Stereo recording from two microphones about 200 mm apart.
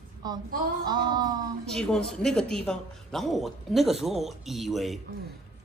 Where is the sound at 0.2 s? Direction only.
20° right (ahead or behind).